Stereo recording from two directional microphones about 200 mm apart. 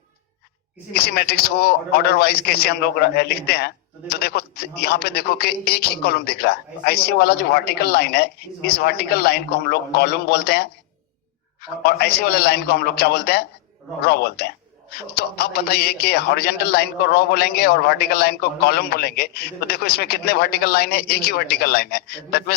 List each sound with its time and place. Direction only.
0.9 s speech: 50° left (ahead or behind)